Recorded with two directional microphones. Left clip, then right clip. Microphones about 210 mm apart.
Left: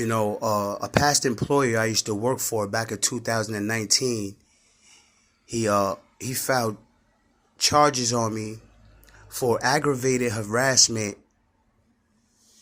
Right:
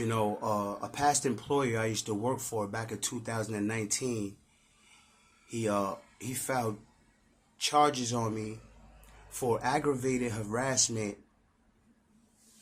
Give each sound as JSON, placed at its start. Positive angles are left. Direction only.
{"t": 0.0, "sound": "speech", "side_deg": 25}
{"t": 5.5, "sound": "speech", "side_deg": 25}